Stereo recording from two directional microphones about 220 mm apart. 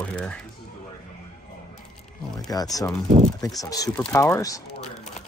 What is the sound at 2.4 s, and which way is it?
Speech, 15° left (ahead or behind).